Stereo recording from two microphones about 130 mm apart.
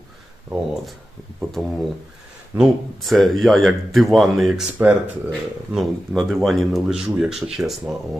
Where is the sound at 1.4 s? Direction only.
Centre (ahead or behind).